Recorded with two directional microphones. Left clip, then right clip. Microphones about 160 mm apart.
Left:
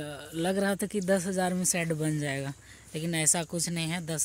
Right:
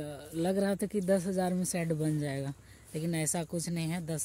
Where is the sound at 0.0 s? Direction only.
Centre (ahead or behind).